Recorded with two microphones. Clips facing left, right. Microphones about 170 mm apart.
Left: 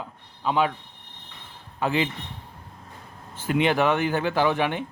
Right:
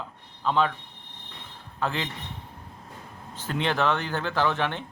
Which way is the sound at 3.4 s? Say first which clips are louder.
Left 4 dB; 15° left (ahead or behind).